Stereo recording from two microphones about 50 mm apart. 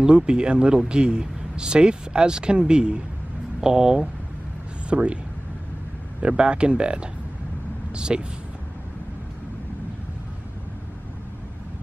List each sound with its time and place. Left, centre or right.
0.0 s speech: centre
4.8 s speech: right
6.2 s speech: centre